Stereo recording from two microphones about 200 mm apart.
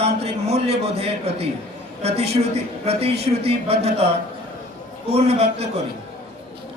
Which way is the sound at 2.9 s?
30° right (ahead or behind).